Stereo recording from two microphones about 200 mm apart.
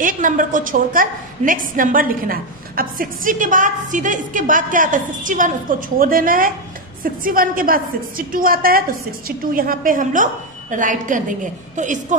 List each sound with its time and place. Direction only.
0.0 s a woman's voice: 40° right (ahead or behind)